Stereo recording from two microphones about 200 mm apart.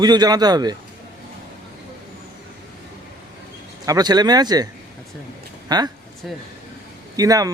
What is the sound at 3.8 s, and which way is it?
Speech, 20° right (ahead or behind).